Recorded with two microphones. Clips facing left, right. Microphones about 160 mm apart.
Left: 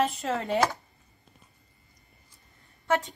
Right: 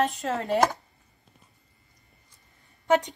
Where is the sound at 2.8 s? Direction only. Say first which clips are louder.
Right 4 dB; 20° right (ahead or behind).